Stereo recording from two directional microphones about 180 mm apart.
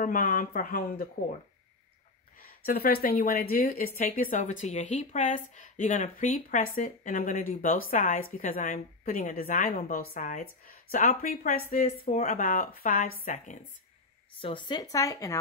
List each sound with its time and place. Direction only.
0.0 s a woman's voice: 50° left (ahead or behind)
2.4 s a woman's voice: 55° left (ahead or behind)
14.4 s speech: 25° left (ahead or behind)